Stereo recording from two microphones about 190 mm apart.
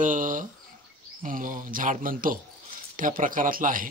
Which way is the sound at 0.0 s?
45° right (ahead or behind).